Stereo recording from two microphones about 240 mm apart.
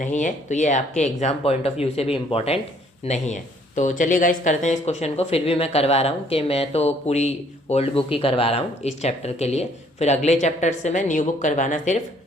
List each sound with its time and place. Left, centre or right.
0.0 s a woman's voice: left